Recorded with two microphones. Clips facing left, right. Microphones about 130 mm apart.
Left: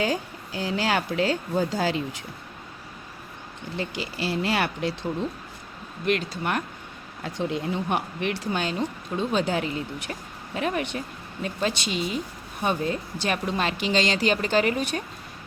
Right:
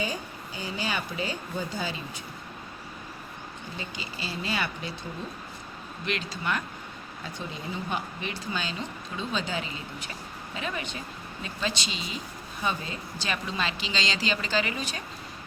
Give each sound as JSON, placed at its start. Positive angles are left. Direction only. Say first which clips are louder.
{"t": 0.0, "sound": "speech", "louder": "left 6 dB", "side_deg": 90}
{"t": 3.8, "sound": "speech", "louder": "left 9 dB", "side_deg": 70}
{"t": 6.1, "sound": "speech", "louder": "left 5 dB", "side_deg": 55}
{"t": 7.3, "sound": "speech", "louder": "left 9 dB", "side_deg": 75}